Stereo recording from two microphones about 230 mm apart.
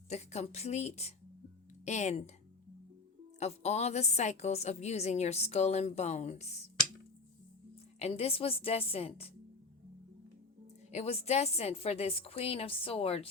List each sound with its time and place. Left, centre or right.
0.1 s a woman's voice: left
3.4 s a woman's voice: left
7.9 s a woman's voice: left
10.9 s a woman's voice: left